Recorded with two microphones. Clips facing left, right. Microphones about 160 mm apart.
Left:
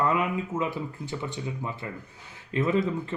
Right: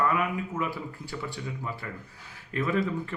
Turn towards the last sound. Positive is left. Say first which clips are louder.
# left 2 dB
turn(degrees=20)  # may be behind; listen again after turning